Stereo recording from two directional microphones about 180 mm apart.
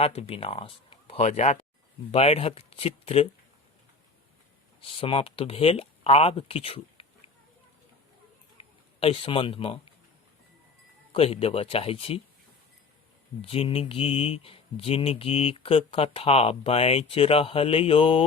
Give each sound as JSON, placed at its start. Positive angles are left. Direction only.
{"t": 0.0, "sound": "speech", "side_deg": 35}
{"t": 4.8, "sound": "speech", "side_deg": 30}
{"t": 8.5, "sound": "a sound", "side_deg": 30}
{"t": 11.1, "sound": "speech", "side_deg": 30}
{"t": 13.4, "sound": "speech", "side_deg": 30}